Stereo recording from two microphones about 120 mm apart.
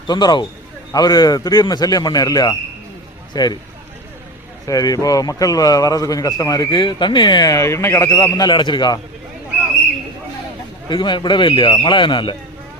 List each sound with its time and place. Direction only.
0.1 s a man's voice: 40° left (ahead or behind)
4.6 s a man's voice: 30° left (ahead or behind)
8.4 s a man's voice: 40° left (ahead or behind)
10.8 s a man's voice: 40° left (ahead or behind)